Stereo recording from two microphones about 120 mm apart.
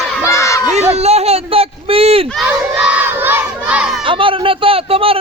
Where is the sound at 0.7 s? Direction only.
65° right (ahead or behind).